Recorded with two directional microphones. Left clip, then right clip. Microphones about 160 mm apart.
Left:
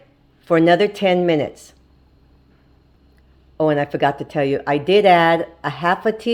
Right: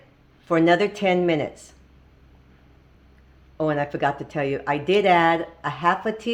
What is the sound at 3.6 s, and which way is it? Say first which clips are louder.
Speech: left 6 dB; 45° left (ahead or behind).